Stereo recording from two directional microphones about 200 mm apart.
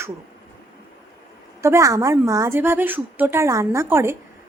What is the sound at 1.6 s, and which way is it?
A woman's voice, 15° right (ahead or behind).